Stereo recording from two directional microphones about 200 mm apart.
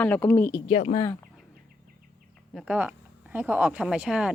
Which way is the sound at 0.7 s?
30° left (ahead or behind).